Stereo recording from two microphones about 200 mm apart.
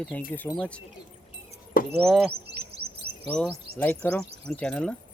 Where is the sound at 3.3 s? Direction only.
5° left (ahead or behind).